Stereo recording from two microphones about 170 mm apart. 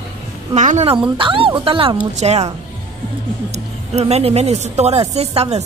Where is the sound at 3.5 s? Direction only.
40° right (ahead or behind).